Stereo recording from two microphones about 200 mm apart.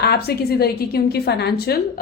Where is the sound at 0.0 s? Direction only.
55° left (ahead or behind).